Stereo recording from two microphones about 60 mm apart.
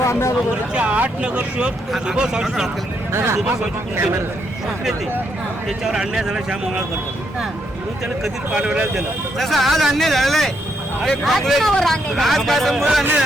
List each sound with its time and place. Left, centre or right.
0.0 s vehicle: left
0.7 s speech: right
3.1 s speech: right
5.6 s speech: centre
8.5 s speech: centre
9.4 s speech: centre